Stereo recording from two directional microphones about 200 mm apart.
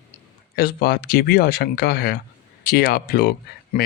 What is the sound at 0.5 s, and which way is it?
Speech, 50° left (ahead or behind).